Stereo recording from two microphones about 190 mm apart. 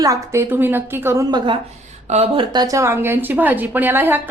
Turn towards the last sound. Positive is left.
turn(degrees=-10)  # may be behind; listen again after turning